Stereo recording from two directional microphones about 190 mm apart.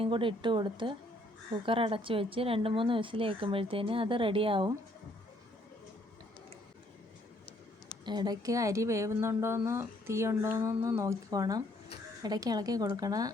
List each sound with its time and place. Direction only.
0.0 s speech: 25° right (ahead or behind)
8.0 s a woman's voice: 20° right (ahead or behind)